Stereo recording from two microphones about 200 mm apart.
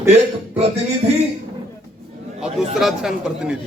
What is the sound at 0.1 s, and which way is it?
Speech, 30° right (ahead or behind).